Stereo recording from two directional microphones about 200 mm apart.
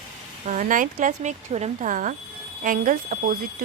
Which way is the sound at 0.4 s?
40° right (ahead or behind).